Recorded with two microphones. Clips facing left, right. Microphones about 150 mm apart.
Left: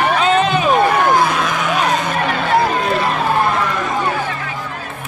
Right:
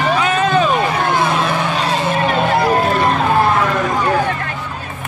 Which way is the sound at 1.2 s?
30° right (ahead or behind).